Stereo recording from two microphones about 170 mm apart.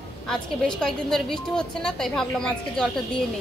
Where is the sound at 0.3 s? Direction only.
5° left (ahead or behind).